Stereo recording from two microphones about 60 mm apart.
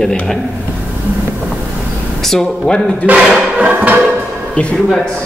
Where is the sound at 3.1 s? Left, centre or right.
Right.